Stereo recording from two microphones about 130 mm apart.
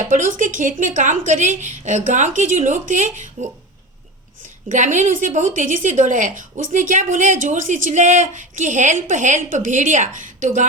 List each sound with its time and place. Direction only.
0.0 s a woman's voice: 85° right; by 3.2 s 70° right (ahead or behind)
4.7 s a woman's voice: 70° right (ahead or behind)